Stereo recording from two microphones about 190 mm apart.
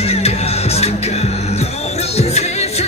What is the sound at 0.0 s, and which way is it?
Music, 35° left (ahead or behind).